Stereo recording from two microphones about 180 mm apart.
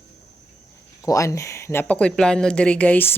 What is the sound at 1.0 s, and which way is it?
Speech, 15° left (ahead or behind).